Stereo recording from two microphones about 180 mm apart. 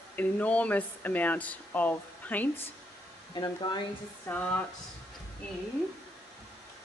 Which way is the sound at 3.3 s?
20° left (ahead or behind).